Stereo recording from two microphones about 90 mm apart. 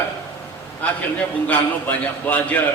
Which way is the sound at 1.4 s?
20° left (ahead or behind).